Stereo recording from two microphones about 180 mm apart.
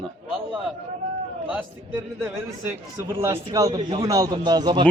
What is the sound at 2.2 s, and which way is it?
A man's voice, 10° right (ahead or behind).